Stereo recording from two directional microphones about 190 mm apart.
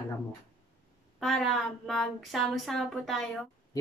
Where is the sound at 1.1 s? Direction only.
Centre (ahead or behind).